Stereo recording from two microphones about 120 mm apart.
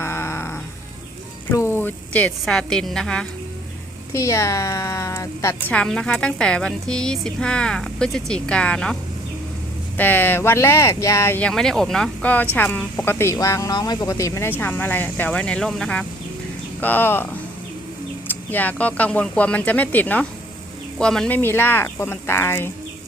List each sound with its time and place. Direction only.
0.0 s music: 20° left (ahead or behind)
1.5 s a woman's voice: 20° left (ahead or behind)
4.1 s speech: 25° left (ahead or behind)
5.7 s speech: 5° left (ahead or behind)
10.0 s speech: 15° left (ahead or behind)
11.3 s speech: 5° left (ahead or behind)
18.5 s a woman's voice: 15° left (ahead or behind)
21.3 s speech: 20° left (ahead or behind)